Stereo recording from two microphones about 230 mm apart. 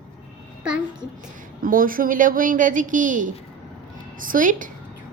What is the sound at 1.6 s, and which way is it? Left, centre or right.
A woman's voice, right.